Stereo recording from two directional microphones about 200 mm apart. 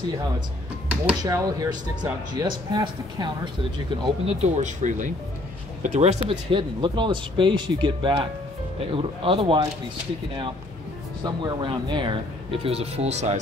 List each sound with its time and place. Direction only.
1.2 s speech: 20° right (ahead or behind)
4.6 s speech: 35° right (ahead or behind)
11.2 s speech: 20° right (ahead or behind)